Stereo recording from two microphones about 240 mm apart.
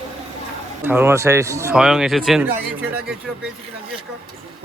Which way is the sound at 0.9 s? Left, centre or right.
Centre.